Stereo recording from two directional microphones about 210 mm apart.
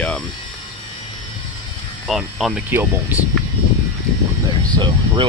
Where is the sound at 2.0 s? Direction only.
Centre (ahead or behind).